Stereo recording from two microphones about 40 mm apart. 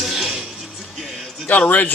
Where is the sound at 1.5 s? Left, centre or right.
Left.